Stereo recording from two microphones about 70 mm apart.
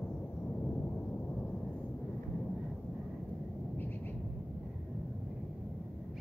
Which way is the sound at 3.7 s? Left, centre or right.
Left.